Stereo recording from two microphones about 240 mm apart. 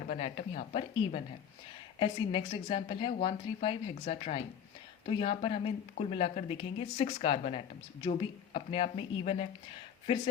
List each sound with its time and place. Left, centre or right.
0.1 s speech: left